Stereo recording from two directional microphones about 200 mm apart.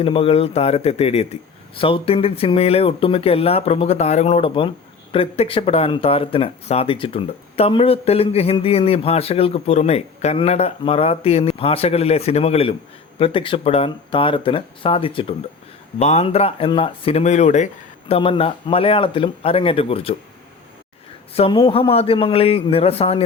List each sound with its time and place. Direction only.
0.0 s speech: 25° left (ahead or behind)
21.3 s speech: 25° left (ahead or behind)